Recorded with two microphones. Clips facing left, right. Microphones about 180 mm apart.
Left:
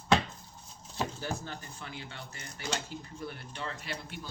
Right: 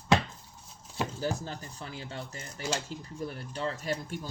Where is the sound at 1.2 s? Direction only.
35° right (ahead or behind).